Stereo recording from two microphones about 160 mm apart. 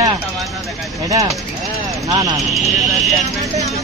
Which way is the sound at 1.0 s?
20° right (ahead or behind).